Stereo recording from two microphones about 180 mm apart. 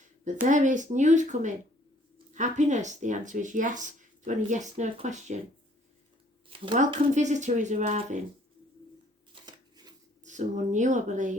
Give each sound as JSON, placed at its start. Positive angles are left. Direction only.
{"t": 0.4, "sound": "speech", "side_deg": -45}
{"t": 6.5, "sound": "speech", "side_deg": -30}
{"t": 6.7, "sound": "speech", "side_deg": -40}
{"t": 9.3, "sound": "shuffling cards", "side_deg": -25}
{"t": 10.2, "sound": "speech", "side_deg": -40}